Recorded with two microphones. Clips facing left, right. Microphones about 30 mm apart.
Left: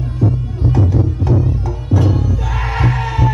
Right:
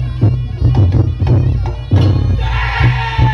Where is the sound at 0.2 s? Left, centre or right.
Right.